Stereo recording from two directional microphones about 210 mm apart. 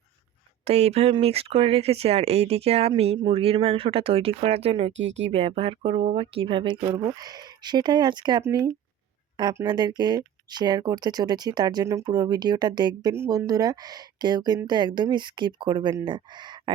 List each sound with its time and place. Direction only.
0.6 s speech: 30° right (ahead or behind)